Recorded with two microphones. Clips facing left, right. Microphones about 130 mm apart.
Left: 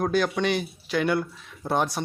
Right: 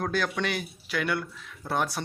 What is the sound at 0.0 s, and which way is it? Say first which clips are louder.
A man's voice: left 5 dB; 15° left (ahead or behind).